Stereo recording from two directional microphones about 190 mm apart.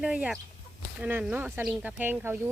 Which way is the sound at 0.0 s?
5° right (ahead or behind).